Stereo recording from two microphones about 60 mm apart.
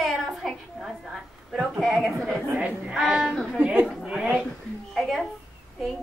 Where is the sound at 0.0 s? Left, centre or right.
Centre.